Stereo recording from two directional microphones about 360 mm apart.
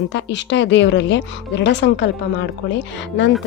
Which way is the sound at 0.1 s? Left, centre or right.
Left.